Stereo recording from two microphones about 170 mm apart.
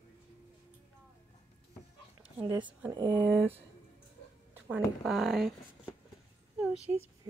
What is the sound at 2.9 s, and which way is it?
Speech, 25° right (ahead or behind).